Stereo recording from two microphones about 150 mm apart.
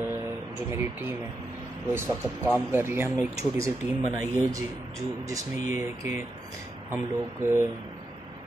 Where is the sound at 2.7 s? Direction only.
15° right (ahead or behind).